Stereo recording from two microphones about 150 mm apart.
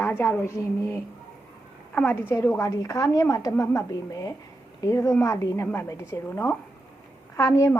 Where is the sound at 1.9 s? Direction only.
15° left (ahead or behind).